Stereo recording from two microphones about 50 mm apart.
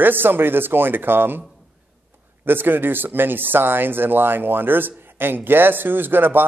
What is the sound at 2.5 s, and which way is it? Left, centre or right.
Speech, right.